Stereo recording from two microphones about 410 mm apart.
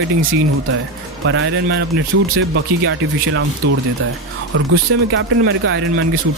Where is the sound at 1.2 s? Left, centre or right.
Right.